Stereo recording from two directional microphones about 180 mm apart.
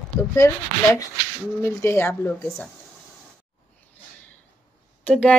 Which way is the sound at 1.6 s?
15° left (ahead or behind).